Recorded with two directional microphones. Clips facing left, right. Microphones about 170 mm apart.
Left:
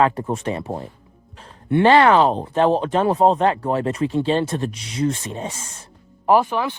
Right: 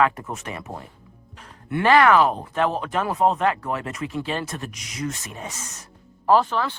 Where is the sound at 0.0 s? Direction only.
30° left (ahead or behind).